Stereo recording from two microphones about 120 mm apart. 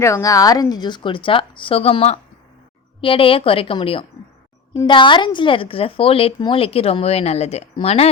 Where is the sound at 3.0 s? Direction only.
50° left (ahead or behind).